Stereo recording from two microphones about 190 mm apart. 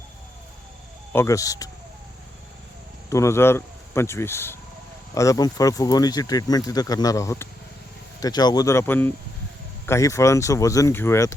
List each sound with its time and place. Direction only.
1.1 s speech: 15° left (ahead or behind)
3.1 s speech: 15° left (ahead or behind)